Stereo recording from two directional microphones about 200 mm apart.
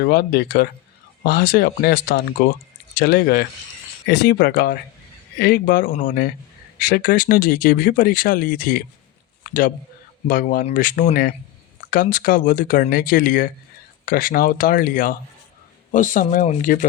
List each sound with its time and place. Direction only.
0.0 s speech: 50° left (ahead or behind)